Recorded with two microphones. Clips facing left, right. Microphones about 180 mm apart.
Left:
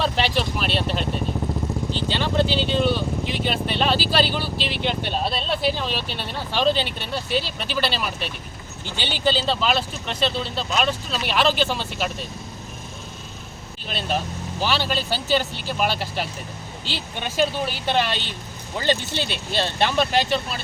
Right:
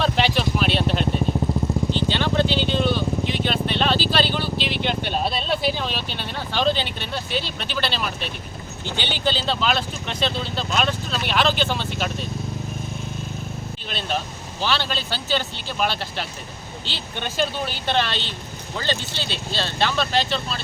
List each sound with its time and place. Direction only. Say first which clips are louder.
0.0 s vehicle: right 1 dB; centre (ahead or behind)
9.0 s speech: left 2 dB; 5° left (ahead or behind)
14.6 s speech: left 1 dB; 10° left (ahead or behind)
19.2 s speech: left 1 dB; 55° left (ahead or behind)
19.5 s speech: left 2 dB; 20° left (ahead or behind)